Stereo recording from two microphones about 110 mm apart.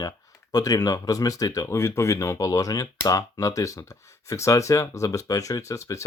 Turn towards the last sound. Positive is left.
turn(degrees=30)  # may be behind; listen again after turning